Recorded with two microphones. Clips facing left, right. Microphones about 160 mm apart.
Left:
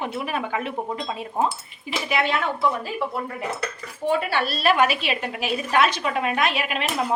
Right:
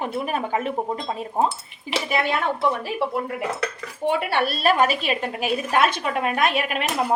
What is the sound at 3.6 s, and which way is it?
Speech, 65° right (ahead or behind).